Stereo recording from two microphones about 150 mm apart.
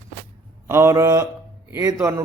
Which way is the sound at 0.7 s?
20° right (ahead or behind).